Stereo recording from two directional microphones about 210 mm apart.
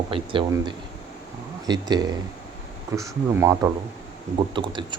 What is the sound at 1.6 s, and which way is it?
Speech, 20° right (ahead or behind).